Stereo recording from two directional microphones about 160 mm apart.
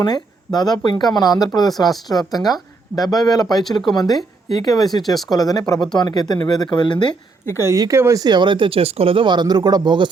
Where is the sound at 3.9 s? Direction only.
25° left (ahead or behind).